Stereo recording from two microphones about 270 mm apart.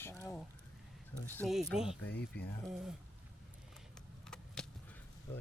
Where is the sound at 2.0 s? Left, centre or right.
Left.